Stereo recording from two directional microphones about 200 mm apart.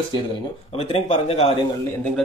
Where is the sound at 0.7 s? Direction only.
30° left (ahead or behind).